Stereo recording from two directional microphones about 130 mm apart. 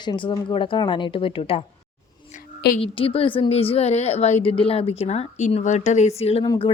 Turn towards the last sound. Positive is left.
turn(degrees=50)  # may be behind; listen again after turning